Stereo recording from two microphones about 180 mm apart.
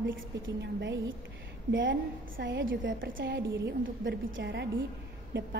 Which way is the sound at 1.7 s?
90° right.